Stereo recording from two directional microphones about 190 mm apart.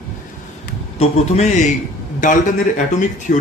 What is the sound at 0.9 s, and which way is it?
A man's voice, 35° left (ahead or behind).